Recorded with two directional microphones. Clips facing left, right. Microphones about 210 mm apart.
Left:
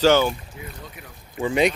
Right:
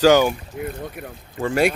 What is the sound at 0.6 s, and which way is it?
Speech, 60° right (ahead or behind).